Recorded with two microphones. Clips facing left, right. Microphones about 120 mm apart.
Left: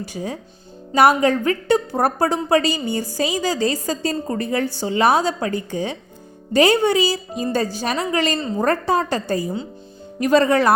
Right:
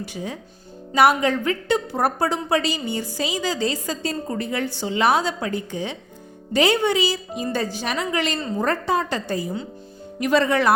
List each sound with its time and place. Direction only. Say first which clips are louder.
0.0 s a woman's voice: left 3 dB; 40° left (ahead or behind)